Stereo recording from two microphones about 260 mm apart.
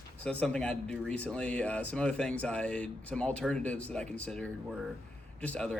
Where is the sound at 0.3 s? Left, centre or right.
Centre.